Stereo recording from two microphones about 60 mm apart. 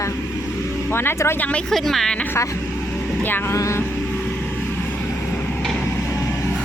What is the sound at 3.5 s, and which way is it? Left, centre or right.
Vehicle, left.